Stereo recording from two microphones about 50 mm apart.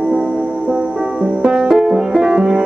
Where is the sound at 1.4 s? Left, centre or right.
Centre.